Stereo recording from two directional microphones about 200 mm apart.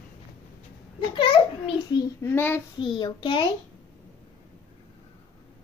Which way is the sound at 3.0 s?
25° left (ahead or behind).